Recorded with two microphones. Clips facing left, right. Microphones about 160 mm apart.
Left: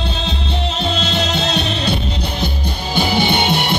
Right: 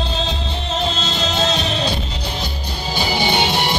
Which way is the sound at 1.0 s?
60° left (ahead or behind).